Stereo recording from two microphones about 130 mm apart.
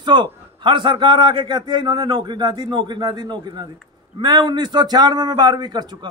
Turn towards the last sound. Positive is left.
turn(degrees=-35)  # may be behind; listen again after turning